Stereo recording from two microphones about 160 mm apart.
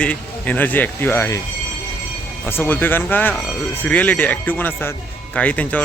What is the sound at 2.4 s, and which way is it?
Speech, 15° left (ahead or behind).